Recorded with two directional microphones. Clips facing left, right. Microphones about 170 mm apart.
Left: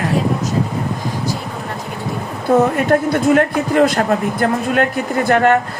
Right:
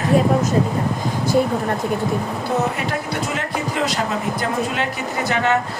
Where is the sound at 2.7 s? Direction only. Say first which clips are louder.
Left 9 dB; 50° left (ahead or behind).